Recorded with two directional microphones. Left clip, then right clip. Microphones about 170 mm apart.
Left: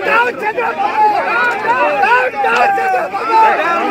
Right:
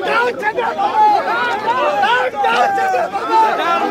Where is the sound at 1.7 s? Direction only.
50° left (ahead or behind).